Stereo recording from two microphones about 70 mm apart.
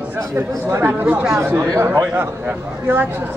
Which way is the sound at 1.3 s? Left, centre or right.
Right.